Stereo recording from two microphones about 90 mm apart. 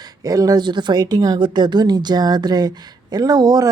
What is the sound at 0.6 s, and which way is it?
A woman's voice, 55° right (ahead or behind).